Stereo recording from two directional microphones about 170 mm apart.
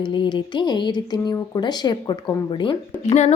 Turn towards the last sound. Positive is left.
turn(degrees=40)  # may be behind; listen again after turning